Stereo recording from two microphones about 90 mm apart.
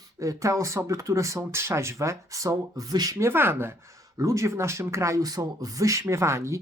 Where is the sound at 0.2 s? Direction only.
35° right (ahead or behind).